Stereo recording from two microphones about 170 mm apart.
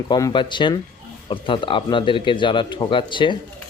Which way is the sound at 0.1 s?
25° left (ahead or behind).